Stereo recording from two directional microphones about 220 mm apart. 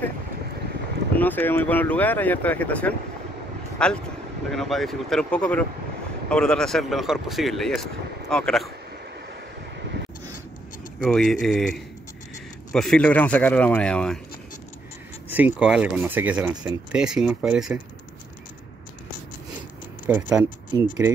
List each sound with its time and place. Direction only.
1.1 s speech: 10° left (ahead or behind)
11.0 s speech: centre (ahead or behind)
15.2 s speech: 10° right (ahead or behind)
20.1 s speech: 5° right (ahead or behind)
20.4 s speech: 20° left (ahead or behind)